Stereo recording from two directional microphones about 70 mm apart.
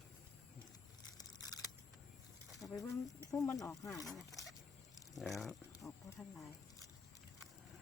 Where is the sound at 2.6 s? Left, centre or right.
Left.